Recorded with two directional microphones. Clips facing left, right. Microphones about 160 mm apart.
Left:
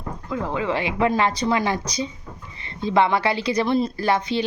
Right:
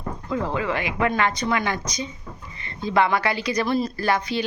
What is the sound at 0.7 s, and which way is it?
Speech, 30° left (ahead or behind).